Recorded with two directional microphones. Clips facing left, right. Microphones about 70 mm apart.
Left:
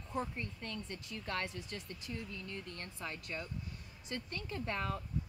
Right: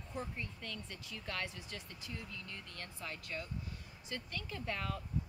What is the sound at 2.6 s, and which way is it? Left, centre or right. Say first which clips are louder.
Speech: left 2 dB; left.